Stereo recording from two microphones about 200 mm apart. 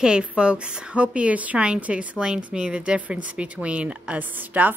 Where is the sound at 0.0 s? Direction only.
5° right (ahead or behind).